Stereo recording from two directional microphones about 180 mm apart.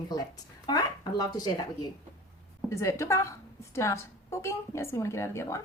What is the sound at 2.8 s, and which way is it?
A woman's voice, 15° left (ahead or behind).